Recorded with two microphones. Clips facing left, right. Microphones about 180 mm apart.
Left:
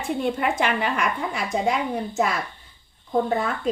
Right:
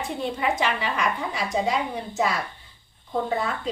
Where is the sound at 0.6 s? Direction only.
55° left (ahead or behind).